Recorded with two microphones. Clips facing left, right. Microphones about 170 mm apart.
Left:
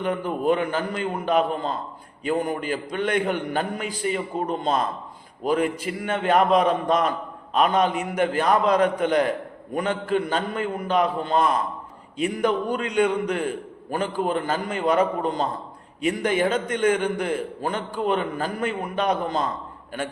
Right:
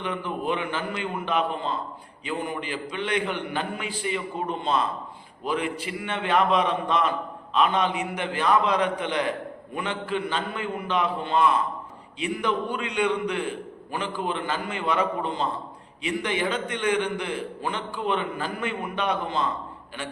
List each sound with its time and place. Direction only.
0.0 s a man's voice: 45° left (ahead or behind)